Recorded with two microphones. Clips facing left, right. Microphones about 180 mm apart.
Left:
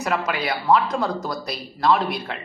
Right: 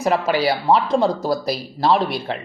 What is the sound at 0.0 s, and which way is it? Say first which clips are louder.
Speech: right 6 dB; 30° right (ahead or behind).